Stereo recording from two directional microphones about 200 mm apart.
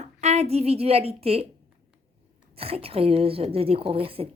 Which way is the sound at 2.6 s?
30° right (ahead or behind).